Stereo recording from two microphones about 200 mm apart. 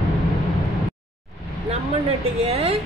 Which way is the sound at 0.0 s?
Centre (ahead or behind).